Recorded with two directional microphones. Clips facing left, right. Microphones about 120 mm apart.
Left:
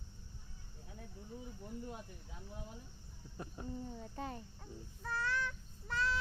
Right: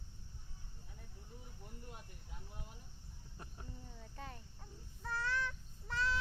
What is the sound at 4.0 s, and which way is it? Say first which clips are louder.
Speech: left 7 dB; 25° left (ahead or behind).